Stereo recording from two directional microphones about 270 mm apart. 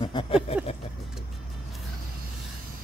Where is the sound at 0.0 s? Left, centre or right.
Centre.